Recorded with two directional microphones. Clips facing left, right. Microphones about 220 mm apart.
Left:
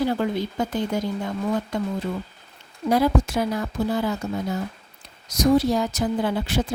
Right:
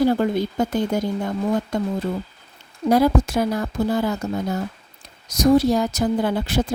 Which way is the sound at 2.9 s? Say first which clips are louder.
Right 3 dB; 45° right (ahead or behind).